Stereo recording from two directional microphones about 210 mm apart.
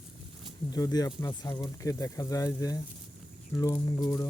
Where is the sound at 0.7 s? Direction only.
20° left (ahead or behind).